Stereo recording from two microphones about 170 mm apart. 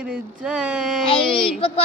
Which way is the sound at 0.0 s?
5° right (ahead or behind).